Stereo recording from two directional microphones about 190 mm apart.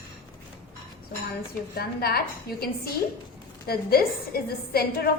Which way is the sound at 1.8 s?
55° left (ahead or behind).